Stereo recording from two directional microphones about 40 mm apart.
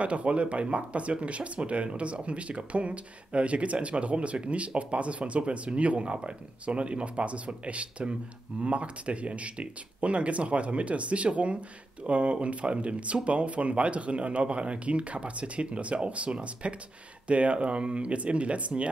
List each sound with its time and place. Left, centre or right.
0.0 s speech: right